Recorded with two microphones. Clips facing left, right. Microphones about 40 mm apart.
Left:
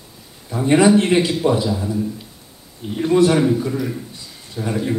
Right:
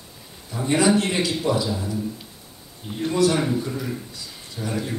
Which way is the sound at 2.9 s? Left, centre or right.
Left.